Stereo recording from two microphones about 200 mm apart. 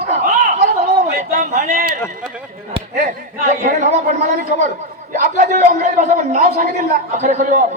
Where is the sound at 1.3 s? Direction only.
45° right (ahead or behind).